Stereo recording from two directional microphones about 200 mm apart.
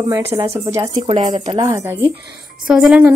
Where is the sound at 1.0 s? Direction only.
30° right (ahead or behind).